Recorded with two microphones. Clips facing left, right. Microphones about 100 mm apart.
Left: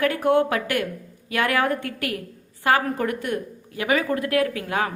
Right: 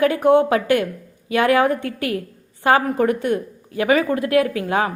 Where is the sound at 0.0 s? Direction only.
20° right (ahead or behind).